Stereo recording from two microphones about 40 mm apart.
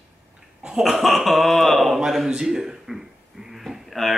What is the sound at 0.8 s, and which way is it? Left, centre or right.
Speech, centre.